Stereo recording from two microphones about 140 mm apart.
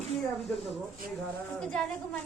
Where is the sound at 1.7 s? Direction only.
10° left (ahead or behind).